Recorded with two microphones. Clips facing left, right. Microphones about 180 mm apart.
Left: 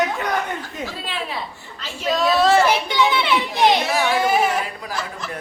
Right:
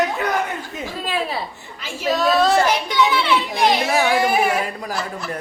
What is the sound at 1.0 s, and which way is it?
Speech, 45° right (ahead or behind).